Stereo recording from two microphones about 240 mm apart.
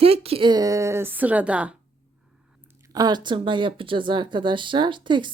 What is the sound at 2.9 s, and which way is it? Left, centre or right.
Speech, centre.